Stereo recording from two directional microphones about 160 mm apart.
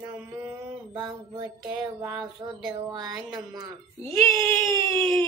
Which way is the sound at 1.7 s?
15° right (ahead or behind).